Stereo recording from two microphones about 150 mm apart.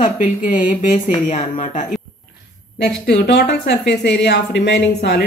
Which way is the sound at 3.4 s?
90° left.